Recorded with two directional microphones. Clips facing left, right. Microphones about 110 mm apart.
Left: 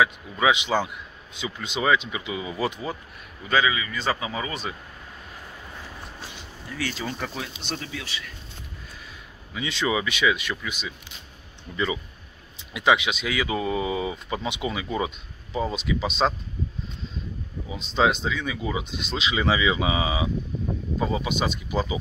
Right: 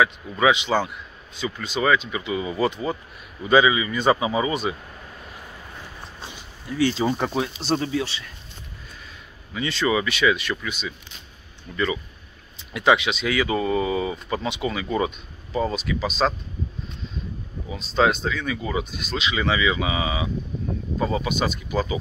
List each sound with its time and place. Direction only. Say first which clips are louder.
0.0 s speech: right 2 dB; 10° left (ahead or behind)
3.4 s a man's voice: right 6 dB; 20° right (ahead or behind)
6.8 s speech: right 9 dB; 25° right (ahead or behind)
9.5 s speech: right 3 dB; 10° left (ahead or behind)
15.7 s speech: right 1 dB; 20° left (ahead or behind)
17.6 s speech: right 2 dB; 15° left (ahead or behind)
18.9 s speech: right 1 dB; 25° left (ahead or behind)
21.0 s speech: right 2 dB; 5° left (ahead or behind)
21.3 s speech: right 2 dB; 20° left (ahead or behind)